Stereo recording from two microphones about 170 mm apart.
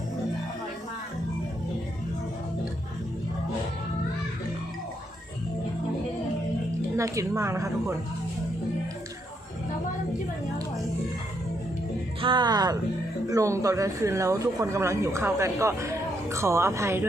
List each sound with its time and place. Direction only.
6.9 s speech: 20° right (ahead or behind)
12.2 s speech: 25° right (ahead or behind)